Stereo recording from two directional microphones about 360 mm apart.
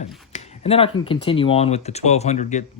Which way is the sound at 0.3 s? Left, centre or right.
Centre.